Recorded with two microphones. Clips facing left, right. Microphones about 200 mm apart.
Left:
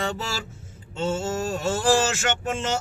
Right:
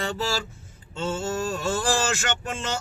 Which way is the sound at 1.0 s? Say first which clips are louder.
Left 2 dB; 25° left (ahead or behind).